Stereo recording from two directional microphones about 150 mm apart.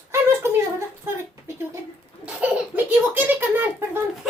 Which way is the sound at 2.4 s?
10° right (ahead or behind).